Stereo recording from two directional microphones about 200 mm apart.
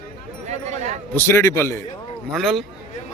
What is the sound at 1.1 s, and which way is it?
Speech, 15° left (ahead or behind).